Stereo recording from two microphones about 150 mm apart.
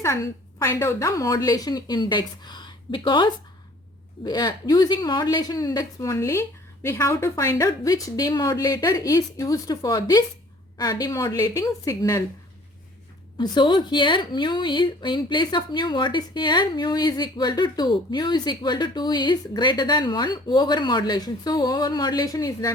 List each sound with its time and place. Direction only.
0.6 s a woman's voice: 20° left (ahead or behind)
13.4 s a woman's voice: 30° left (ahead or behind)